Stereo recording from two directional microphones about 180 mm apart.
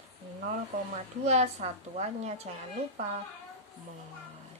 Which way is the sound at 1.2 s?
35° right (ahead or behind).